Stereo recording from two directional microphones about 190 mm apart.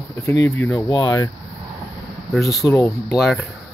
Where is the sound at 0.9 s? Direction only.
20° left (ahead or behind).